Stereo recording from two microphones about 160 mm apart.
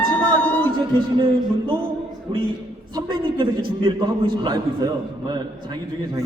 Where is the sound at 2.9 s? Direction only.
30° right (ahead or behind).